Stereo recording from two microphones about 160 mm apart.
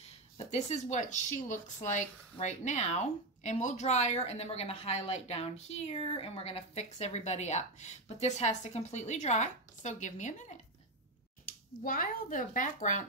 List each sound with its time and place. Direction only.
0.5 s a woman's voice: 45° left (ahead or behind)
11.4 s speech: 60° left (ahead or behind)